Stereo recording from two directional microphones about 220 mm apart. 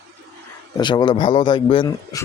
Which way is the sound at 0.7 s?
20° left (ahead or behind).